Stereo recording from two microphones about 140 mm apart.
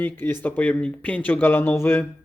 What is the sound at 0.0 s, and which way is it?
Speech, 15° left (ahead or behind).